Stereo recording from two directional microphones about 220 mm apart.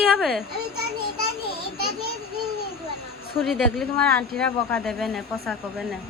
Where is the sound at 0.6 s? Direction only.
45° right (ahead or behind).